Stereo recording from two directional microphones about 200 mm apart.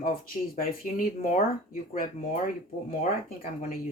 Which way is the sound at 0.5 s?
40° left (ahead or behind).